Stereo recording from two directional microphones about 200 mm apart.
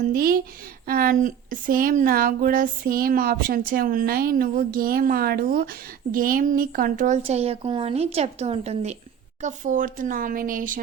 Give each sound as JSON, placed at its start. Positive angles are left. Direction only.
{"t": 0.0, "sound": "a woman's voice", "side_deg": -45}